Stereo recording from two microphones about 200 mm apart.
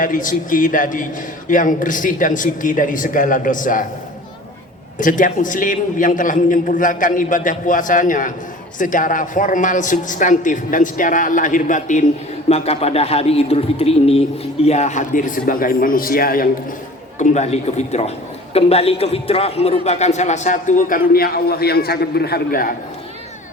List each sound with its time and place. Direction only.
0.0 s a man's voice: 40° left (ahead or behind)
4.9 s a man's voice: 40° left (ahead or behind)
17.2 s a man's voice: 35° left (ahead or behind)